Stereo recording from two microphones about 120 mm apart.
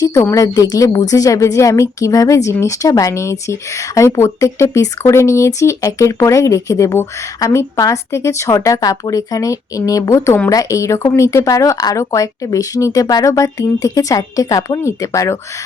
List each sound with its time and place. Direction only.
0.0 s a woman's voice: 30° left (ahead or behind)